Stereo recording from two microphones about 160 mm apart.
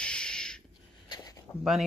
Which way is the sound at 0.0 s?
5° left (ahead or behind).